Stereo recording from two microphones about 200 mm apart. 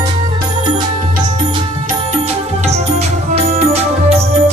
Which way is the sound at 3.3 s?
30° right (ahead or behind).